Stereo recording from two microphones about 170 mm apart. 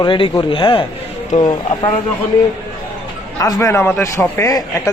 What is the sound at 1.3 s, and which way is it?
Speech, 45° left (ahead or behind).